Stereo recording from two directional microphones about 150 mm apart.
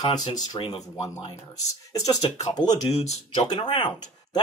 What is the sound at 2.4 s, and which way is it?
Speech, 25° left (ahead or behind).